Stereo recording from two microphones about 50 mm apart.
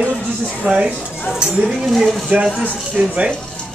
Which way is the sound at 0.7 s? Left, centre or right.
Right.